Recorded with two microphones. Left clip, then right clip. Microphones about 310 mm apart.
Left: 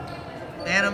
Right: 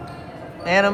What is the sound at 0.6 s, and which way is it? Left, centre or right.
Speech, centre.